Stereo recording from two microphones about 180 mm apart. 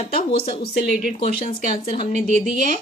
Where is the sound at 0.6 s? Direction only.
60° left (ahead or behind).